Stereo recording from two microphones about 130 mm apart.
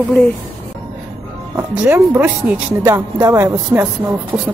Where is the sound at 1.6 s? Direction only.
15° right (ahead or behind).